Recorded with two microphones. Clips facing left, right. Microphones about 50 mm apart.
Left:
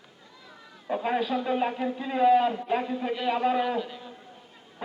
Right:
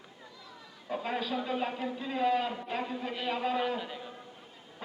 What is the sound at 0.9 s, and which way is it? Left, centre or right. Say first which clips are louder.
A man's voice: left 6 dB; centre.